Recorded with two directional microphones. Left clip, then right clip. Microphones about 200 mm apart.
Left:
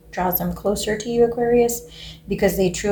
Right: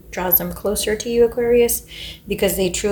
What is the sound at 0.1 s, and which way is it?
Speech, 35° right (ahead or behind).